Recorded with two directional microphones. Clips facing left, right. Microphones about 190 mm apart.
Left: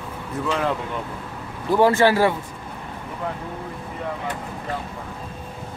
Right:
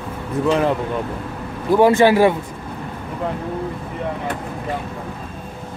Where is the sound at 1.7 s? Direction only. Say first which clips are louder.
Right 4 dB; 15° right (ahead or behind).